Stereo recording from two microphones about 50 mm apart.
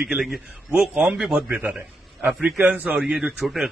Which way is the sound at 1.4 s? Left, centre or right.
Right.